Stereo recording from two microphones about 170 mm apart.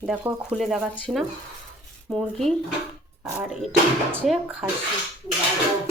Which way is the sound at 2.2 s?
Centre (ahead or behind).